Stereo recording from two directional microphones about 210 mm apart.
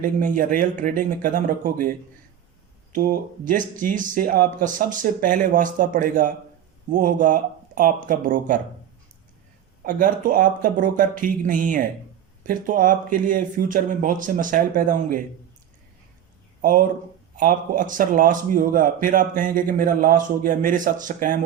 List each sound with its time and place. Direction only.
0.0 s a man's voice: 40° right (ahead or behind)
9.8 s a man's voice: 40° right (ahead or behind)
16.6 s a man's voice: 40° right (ahead or behind)